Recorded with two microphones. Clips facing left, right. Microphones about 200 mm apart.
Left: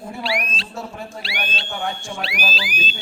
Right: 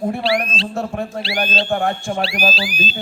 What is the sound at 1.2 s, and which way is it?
Speech, 60° right (ahead or behind).